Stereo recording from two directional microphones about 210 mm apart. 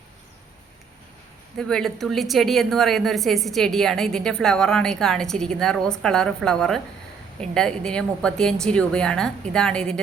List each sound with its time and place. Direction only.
1.5 s a woman's voice: 5° left (ahead or behind)